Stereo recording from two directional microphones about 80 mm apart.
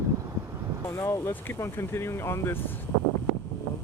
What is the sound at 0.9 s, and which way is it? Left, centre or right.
Speech, left.